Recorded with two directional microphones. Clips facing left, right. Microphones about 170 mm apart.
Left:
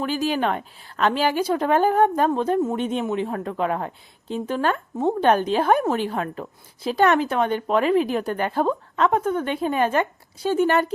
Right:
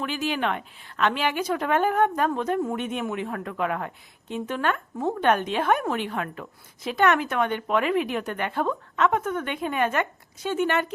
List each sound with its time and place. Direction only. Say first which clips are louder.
0.0 s speech: left 4 dB; 35° left (ahead or behind)